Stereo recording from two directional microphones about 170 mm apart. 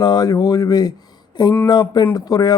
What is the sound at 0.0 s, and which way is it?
Speech, 25° left (ahead or behind).